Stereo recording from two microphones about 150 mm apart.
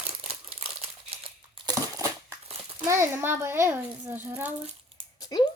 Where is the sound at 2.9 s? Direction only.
20° right (ahead or behind).